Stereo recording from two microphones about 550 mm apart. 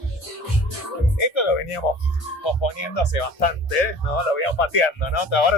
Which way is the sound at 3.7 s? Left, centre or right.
Left.